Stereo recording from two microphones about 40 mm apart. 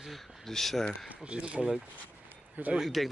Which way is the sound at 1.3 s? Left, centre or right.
Right.